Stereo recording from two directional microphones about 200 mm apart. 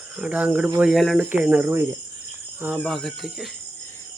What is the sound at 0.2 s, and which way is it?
Speech, 5° right (ahead or behind).